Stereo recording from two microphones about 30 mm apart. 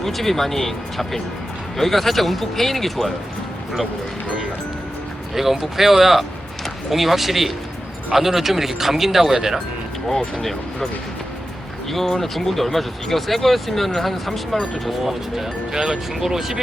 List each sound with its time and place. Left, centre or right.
0.0 s speech: centre
5.3 s speech: centre
10.4 s speech: centre
11.9 s speech: centre
14.8 s speech: centre